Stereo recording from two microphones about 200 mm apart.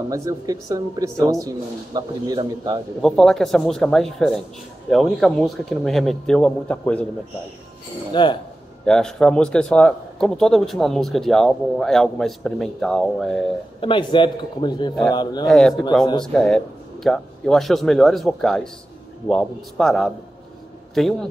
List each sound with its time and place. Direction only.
0.1 s a man's voice: 15° right (ahead or behind)
3.0 s speech: centre (ahead or behind)
8.1 s speech: 25° left (ahead or behind)
8.8 s speech: 5° left (ahead or behind)
13.7 s a man's voice: 25° left (ahead or behind)
15.4 s speech: centre (ahead or behind)